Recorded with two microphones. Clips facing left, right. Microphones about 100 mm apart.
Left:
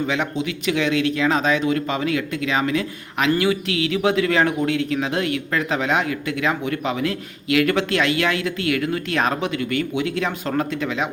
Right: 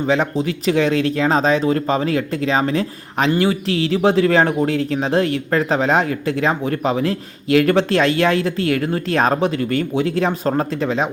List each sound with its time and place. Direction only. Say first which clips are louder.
0.0 s speech: right 5 dB; 35° right (ahead or behind)